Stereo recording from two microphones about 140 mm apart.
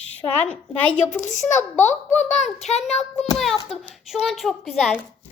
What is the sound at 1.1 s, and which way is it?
A woman's voice, 60° left (ahead or behind).